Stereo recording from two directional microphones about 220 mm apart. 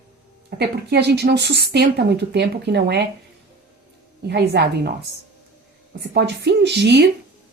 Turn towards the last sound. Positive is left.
turn(degrees=-50)  # may be behind; listen again after turning